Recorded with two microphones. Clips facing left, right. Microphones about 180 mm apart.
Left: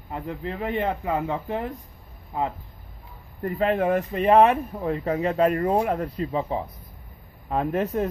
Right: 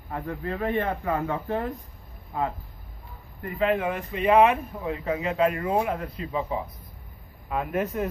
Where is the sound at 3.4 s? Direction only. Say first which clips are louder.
Left 2 dB; 40° left (ahead or behind).